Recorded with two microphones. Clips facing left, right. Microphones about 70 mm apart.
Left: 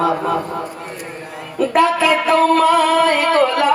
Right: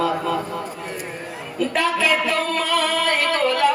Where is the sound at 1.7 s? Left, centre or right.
Left.